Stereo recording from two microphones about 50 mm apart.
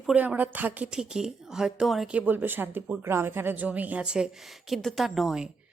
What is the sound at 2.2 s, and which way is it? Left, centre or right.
Speech, right.